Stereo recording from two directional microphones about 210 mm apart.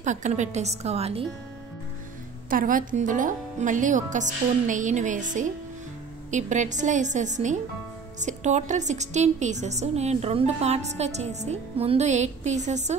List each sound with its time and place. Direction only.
0.0 s a woman's voice: 35° right (ahead or behind)
2.5 s a woman's voice: 40° right (ahead or behind)